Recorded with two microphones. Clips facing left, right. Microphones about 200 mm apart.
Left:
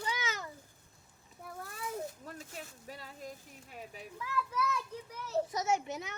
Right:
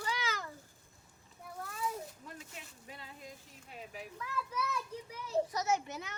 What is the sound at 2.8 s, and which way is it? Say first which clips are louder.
Speech: left 4 dB; 45° left (ahead or behind).